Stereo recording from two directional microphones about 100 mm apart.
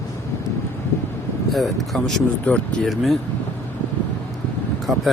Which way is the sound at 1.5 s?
Centre (ahead or behind).